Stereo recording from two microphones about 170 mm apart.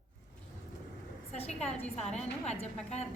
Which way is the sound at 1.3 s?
40° left (ahead or behind).